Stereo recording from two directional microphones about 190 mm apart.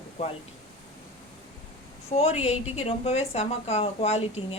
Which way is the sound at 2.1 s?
35° left (ahead or behind).